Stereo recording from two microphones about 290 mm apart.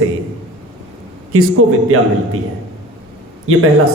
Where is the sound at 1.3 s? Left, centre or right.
Right.